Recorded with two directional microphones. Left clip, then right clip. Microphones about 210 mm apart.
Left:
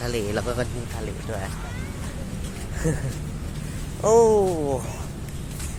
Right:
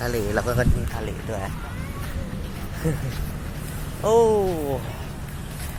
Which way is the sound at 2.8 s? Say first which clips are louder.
Left 1 dB; 5° left (ahead or behind).